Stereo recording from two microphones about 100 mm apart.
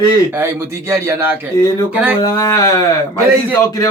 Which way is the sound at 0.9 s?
25° right (ahead or behind).